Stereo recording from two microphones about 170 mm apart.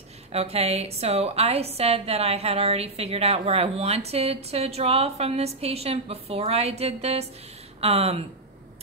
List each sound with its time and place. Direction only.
0.3 s a woman's voice: 35° right (ahead or behind)